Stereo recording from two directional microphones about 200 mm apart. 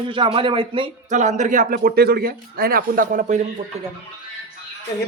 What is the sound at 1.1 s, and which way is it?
A man's voice, 35° right (ahead or behind).